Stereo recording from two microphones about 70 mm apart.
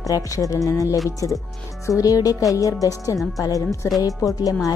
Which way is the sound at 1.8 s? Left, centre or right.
Left.